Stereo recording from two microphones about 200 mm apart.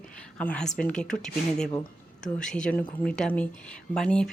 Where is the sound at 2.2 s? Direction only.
5° left (ahead or behind).